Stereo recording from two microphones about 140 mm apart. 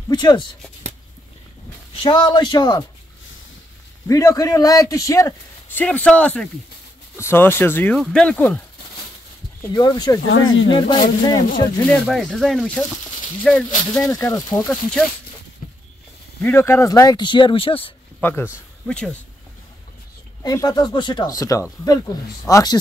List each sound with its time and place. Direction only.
0.1 s speech: 30° left (ahead or behind)
2.0 s speech: 35° left (ahead or behind)
4.1 s a man's voice: 25° left (ahead or behind)
7.9 s speech: 5° left (ahead or behind)
9.6 s a man's voice: 30° left (ahead or behind)
11.9 s speech: 5° left (ahead or behind)
14.0 s a man's voice: 25° left (ahead or behind)
14.7 s speech: 5° left (ahead or behind)
16.3 s a man's voice: 15° left (ahead or behind); by 17.9 s 40° left (ahead or behind)
18.2 s speech: 15° left (ahead or behind)
20.4 s a man's voice: 30° left (ahead or behind)